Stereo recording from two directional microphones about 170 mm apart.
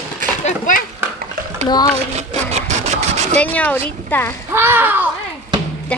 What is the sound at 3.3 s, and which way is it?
Speech, 10° left (ahead or behind).